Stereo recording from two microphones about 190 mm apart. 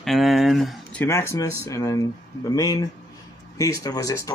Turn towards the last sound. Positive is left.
turn(degrees=15)  # may be behind; listen again after turning